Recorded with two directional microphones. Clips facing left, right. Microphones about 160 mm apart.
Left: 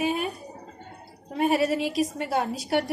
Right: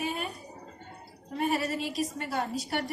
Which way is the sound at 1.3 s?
80° left.